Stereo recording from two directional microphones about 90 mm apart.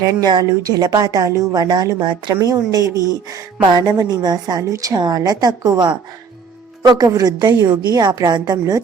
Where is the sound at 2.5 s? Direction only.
40° right (ahead or behind).